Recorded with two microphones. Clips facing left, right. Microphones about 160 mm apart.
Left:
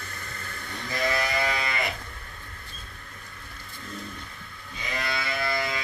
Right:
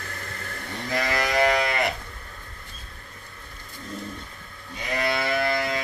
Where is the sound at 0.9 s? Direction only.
85° right; by 1.9 s 60° right (ahead or behind).